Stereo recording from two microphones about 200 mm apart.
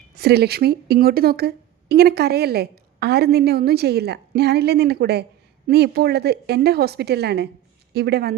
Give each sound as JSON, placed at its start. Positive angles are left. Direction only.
{"t": 0.1, "sound": "speech", "side_deg": -50}